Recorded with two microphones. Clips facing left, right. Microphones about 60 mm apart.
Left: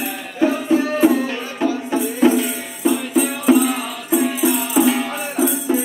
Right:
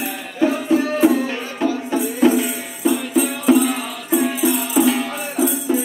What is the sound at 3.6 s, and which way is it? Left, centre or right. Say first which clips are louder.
Music: left 1 dB; centre.